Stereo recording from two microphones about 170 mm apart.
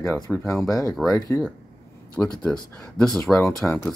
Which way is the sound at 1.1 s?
20° left (ahead or behind).